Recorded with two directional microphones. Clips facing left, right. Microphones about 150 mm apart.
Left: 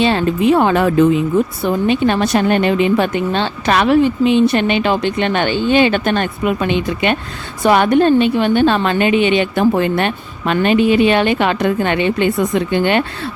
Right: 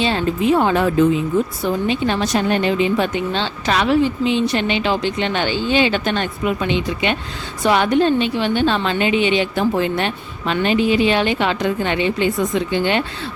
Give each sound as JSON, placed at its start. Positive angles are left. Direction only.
{"t": 0.0, "sound": "a woman's voice", "side_deg": 65}